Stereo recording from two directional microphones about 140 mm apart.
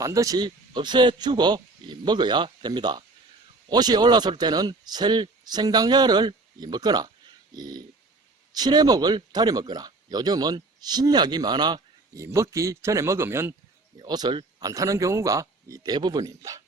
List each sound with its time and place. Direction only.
0.0 s speech: 25° right (ahead or behind)
13.9 s speech: 30° right (ahead or behind)